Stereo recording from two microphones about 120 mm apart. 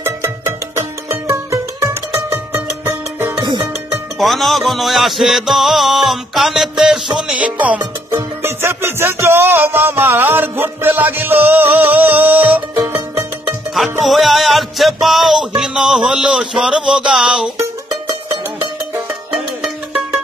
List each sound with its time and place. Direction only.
0.0 s music: 20° right (ahead or behind)
3.3 s music: 40° right (ahead or behind)
4.2 s music: centre (ahead or behind); by 12.5 s 15° right (ahead or behind)
13.7 s music: centre (ahead or behind)
19.3 s music: 5° right (ahead or behind)